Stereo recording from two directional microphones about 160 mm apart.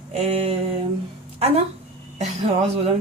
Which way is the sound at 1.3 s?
40° right (ahead or behind).